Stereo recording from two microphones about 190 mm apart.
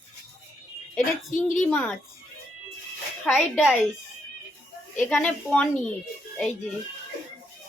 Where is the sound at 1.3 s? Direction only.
45° left (ahead or behind).